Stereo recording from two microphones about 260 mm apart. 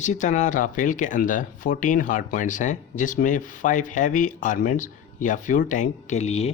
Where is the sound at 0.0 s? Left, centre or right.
Left.